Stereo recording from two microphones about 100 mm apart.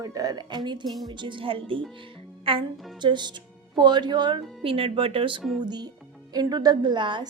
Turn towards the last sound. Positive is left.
turn(degrees=-50)  # may be behind; listen again after turning